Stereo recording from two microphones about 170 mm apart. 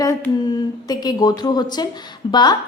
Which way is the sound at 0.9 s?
25° left (ahead or behind).